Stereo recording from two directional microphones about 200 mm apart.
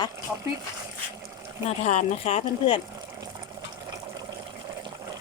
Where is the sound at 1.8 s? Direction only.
35° left (ahead or behind).